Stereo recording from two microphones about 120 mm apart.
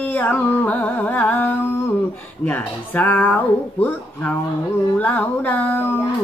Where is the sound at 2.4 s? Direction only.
15° left (ahead or behind).